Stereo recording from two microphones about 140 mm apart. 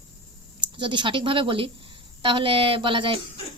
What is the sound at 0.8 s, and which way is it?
A woman's voice, 35° right (ahead or behind).